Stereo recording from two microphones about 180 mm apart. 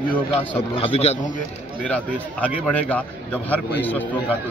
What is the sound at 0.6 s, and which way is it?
Speech, 30° left (ahead or behind).